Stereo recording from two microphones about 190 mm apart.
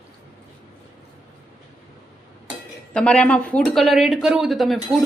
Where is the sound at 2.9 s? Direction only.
5° left (ahead or behind).